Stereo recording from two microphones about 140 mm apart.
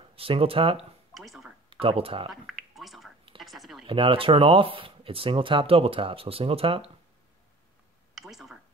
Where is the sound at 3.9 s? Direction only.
40° right (ahead or behind).